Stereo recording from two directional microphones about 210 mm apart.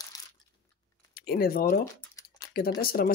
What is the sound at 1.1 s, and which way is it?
Speech, 45° left (ahead or behind).